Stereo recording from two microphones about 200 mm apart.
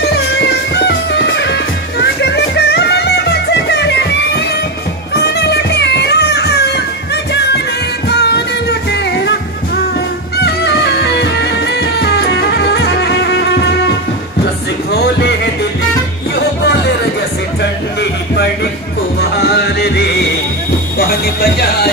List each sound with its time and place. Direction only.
0.7 s music: 60° left (ahead or behind)
8.1 s music: 55° left (ahead or behind)
10.3 s music: 55° left (ahead or behind)
14.9 s music: 55° left (ahead or behind)
16.3 s music: 55° left (ahead or behind)
18.3 s music: 55° left (ahead or behind)